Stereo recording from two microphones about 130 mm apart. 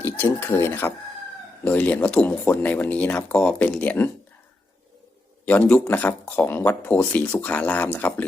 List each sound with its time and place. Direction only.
0.0 s speech: 15° left (ahead or behind)
5.5 s speech: 10° left (ahead or behind)